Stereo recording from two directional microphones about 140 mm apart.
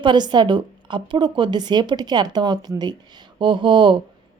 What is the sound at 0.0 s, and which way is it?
A woman's voice, 35° right (ahead or behind).